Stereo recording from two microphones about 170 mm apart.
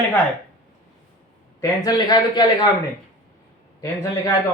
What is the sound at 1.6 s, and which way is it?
A man's voice, 25° left (ahead or behind).